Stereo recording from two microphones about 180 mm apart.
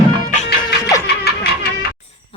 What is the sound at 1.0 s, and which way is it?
Music, 60° left (ahead or behind).